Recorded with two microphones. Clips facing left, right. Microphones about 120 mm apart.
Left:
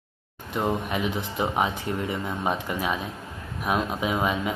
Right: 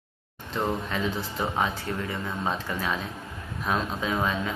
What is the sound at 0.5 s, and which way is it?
Speech, 15° left (ahead or behind).